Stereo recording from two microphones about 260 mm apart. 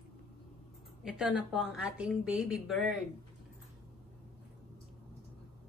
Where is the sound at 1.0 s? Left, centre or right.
Centre.